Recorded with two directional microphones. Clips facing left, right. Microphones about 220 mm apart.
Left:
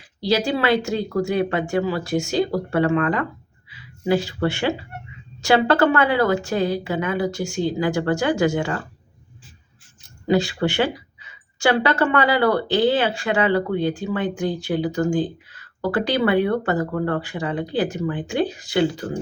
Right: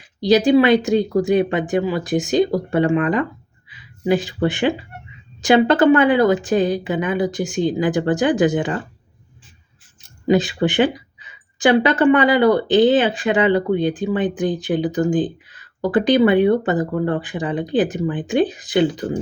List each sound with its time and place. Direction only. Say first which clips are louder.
0.2 s a woman's voice: right 8 dB; 20° right (ahead or behind)
10.2 s a woman's voice: right 3 dB; 20° right (ahead or behind)